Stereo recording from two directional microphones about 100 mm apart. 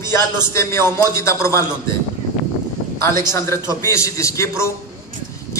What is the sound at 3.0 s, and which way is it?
A man's voice, 30° left (ahead or behind).